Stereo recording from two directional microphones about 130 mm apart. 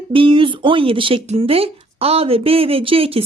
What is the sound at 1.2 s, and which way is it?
A woman's voice, 50° right (ahead or behind).